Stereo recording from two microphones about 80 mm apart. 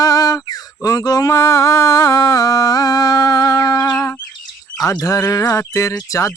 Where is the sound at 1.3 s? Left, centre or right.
Left.